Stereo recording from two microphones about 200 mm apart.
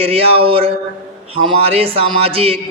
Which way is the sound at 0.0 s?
30° right (ahead or behind).